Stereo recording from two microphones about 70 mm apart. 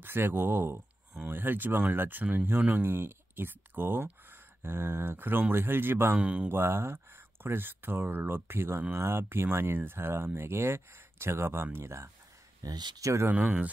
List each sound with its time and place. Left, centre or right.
0.0 s speech: right
6.1 s speech: centre
6.5 s speech: right
12.6 s speech: right
13.0 s speech: right
13.3 s speech: right